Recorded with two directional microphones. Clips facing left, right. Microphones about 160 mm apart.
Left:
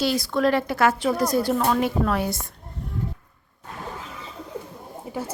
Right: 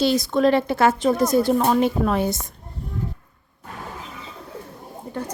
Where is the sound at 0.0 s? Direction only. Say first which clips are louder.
Right 3 dB; 20° right (ahead or behind).